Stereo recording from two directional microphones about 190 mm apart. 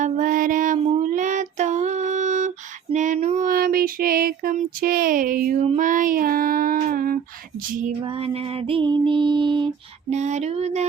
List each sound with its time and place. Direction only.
0.0 s music: 45° right (ahead or behind)
0.9 s child singing: 40° right (ahead or behind)
2.9 s female singing: 40° right (ahead or behind)
8.0 s music: 30° right (ahead or behind)
10.1 s female singing: 35° right (ahead or behind)